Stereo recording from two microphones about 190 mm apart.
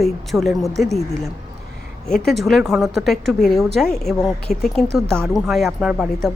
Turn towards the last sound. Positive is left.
turn(degrees=0)  # may be behind; listen again after turning